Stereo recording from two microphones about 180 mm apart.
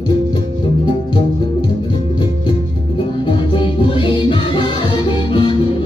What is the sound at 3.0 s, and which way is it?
Music, 30° left (ahead or behind).